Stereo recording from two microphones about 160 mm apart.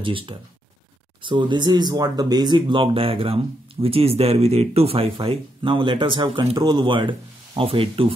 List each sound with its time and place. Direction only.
0.0 s speech: 30° right (ahead or behind)